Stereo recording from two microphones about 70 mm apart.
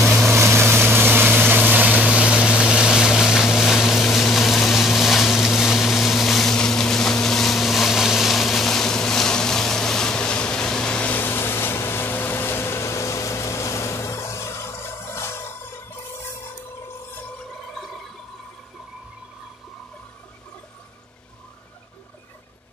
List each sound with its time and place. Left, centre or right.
0.0 s vehicle: centre
0.3 s vehicle: right; by 11.2 s centre
11.2 s a sound: left